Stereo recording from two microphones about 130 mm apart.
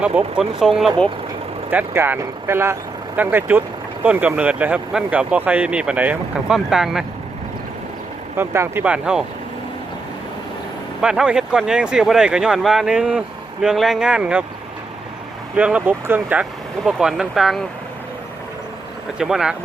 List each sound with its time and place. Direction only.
0.2 s speech: 5° right (ahead or behind)
1.7 s speech: 15° right (ahead or behind)
8.4 s speech: 20° right (ahead or behind)
11.0 s speech: 5° right (ahead or behind)
15.5 s speech: 10° right (ahead or behind)
19.2 s speech: 5° right (ahead or behind)